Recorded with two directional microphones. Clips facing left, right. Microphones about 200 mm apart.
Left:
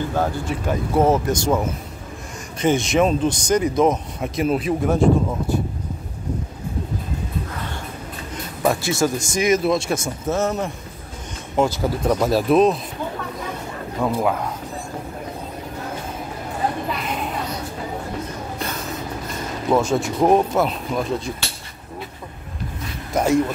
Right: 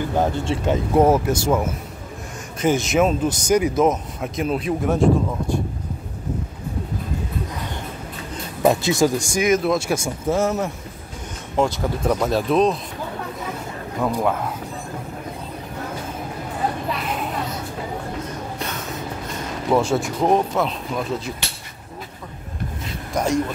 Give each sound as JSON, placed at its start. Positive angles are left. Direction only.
{"t": 0.1, "sound": "speech", "side_deg": -20}
{"t": 1.0, "sound": "speech", "side_deg": -10}
{"t": 8.6, "sound": "speech", "side_deg": -20}
{"t": 9.4, "sound": "speech", "side_deg": 0}
{"t": 11.5, "sound": "speech", "side_deg": 0}
{"t": 14.0, "sound": "speech", "side_deg": 0}
{"t": 19.7, "sound": "speech", "side_deg": -10}
{"t": 20.2, "sound": "speech", "side_deg": 5}
{"t": 23.1, "sound": "speech", "side_deg": 5}